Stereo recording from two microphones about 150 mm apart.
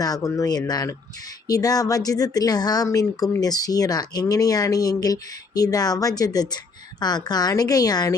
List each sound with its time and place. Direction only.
0.0 s speech: 25° left (ahead or behind)